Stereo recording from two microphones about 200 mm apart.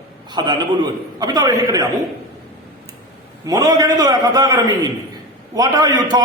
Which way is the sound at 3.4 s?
15° right (ahead or behind).